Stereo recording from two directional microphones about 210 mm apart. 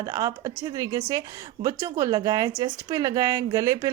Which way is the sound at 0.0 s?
15° right (ahead or behind).